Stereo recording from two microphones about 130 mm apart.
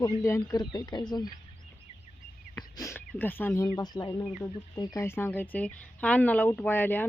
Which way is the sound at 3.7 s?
30° left (ahead or behind).